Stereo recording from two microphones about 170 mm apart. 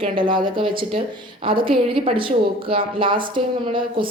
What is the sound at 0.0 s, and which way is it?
A woman's voice, 30° right (ahead or behind).